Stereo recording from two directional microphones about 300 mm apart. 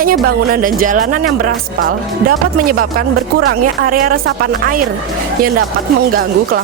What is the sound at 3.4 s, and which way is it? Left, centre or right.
Speech, right.